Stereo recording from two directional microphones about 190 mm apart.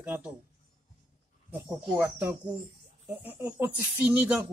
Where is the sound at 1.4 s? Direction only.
10° right (ahead or behind).